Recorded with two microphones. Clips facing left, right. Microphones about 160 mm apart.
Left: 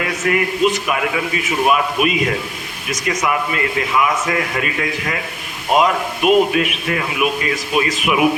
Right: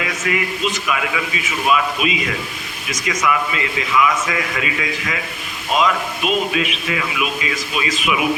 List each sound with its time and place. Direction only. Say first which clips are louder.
0.0 s a man's voice: left 4 dB; 50° left (ahead or behind)
3.1 s a man's voice: even; 35° left (ahead or behind)
3.5 s a man's voice: left 2 dB; 50° left (ahead or behind)
5.7 s a man's voice: left 3 dB; 55° left (ahead or behind)